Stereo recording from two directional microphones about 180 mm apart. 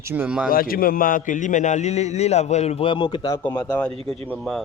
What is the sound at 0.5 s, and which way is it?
A man's voice, 55° left (ahead or behind).